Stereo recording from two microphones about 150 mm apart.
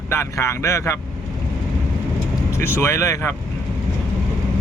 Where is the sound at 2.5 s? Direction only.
15° left (ahead or behind).